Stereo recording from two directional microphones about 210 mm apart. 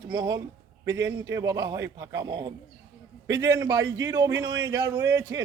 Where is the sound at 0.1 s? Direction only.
15° right (ahead or behind).